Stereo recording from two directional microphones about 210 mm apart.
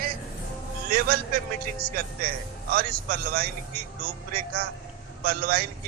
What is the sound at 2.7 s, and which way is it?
A man's voice, 45° right (ahead or behind).